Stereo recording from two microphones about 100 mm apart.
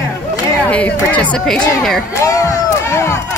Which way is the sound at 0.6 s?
15° left (ahead or behind).